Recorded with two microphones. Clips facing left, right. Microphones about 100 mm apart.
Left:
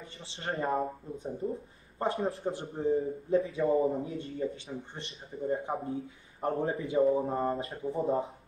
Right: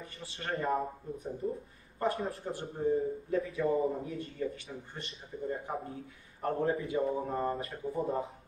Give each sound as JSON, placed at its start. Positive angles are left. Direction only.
{"t": 0.0, "sound": "a man's voice", "side_deg": 25}